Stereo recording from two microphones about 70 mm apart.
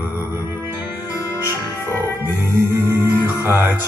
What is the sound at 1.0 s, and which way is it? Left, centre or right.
Music, left.